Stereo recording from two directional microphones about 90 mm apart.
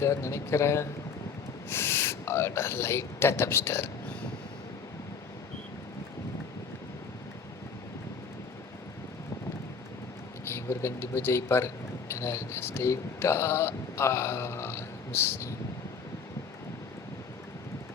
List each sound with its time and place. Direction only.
0.0 s speech: 30° left (ahead or behind)
10.5 s speech: 30° left (ahead or behind)